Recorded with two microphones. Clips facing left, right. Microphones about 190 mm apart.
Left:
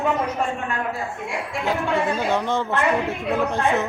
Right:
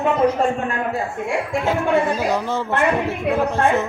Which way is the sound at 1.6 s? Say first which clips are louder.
Right 3 dB; centre (ahead or behind).